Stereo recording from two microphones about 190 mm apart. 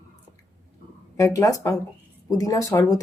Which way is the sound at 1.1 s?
20° left (ahead or behind).